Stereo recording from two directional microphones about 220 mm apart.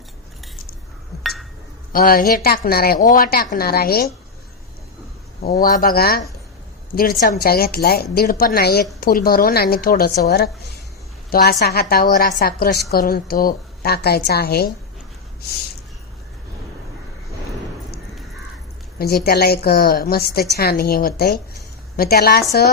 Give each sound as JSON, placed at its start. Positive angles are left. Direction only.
{"t": 1.2, "sound": "chink", "side_deg": 0}
{"t": 1.9, "sound": "a woman's voice", "side_deg": 40}
{"t": 5.4, "sound": "a woman's voice", "side_deg": 45}
{"t": 18.9, "sound": "a woman's voice", "side_deg": 45}